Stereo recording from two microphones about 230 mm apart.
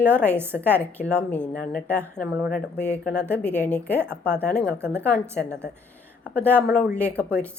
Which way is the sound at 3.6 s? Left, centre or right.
Centre.